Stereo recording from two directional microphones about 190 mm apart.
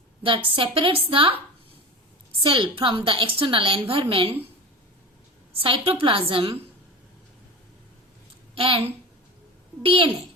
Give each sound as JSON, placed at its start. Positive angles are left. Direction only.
{"t": 0.2, "sound": "a woman's voice", "side_deg": -25}
{"t": 2.4, "sound": "a woman's voice", "side_deg": -25}
{"t": 5.5, "sound": "a woman's voice", "side_deg": -30}
{"t": 8.5, "sound": "a woman's voice", "side_deg": -30}
{"t": 9.8, "sound": "a woman's voice", "side_deg": -30}